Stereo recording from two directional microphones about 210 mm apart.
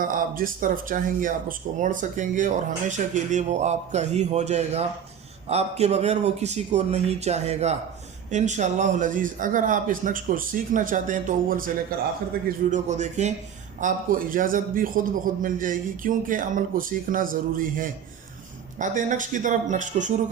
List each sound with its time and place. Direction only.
0.0 s speech: 40° right (ahead or behind)
18.8 s speech: 35° right (ahead or behind)